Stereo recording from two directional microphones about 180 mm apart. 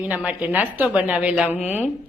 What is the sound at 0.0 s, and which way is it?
Speech, 10° right (ahead or behind).